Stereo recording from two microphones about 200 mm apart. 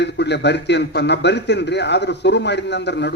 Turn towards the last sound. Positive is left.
turn(degrees=60)  # may be behind; listen again after turning